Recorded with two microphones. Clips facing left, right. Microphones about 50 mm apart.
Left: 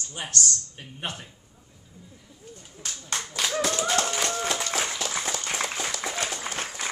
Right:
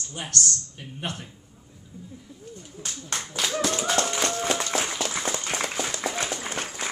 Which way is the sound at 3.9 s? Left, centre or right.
Centre.